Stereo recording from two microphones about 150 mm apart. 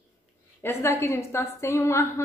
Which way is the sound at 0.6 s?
20° left (ahead or behind).